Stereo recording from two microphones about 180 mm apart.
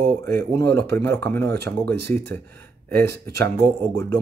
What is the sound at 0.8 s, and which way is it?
Speech, 15° left (ahead or behind).